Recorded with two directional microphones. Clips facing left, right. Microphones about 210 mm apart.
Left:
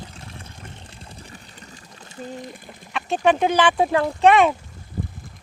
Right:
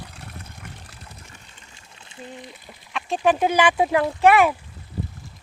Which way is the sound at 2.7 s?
Centre (ahead or behind).